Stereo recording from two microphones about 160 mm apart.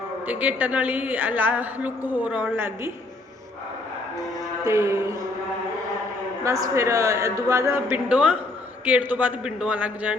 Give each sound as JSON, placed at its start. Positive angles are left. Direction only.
{"t": 0.3, "sound": "a woman's voice", "side_deg": -10}
{"t": 4.6, "sound": "a woman's voice", "side_deg": -15}
{"t": 6.4, "sound": "a man's voice", "side_deg": -20}
{"t": 7.9, "sound": "a woman's voice", "side_deg": -10}